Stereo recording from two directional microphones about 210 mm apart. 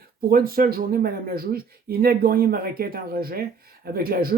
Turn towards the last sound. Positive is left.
turn(degrees=-45)  # may be behind; listen again after turning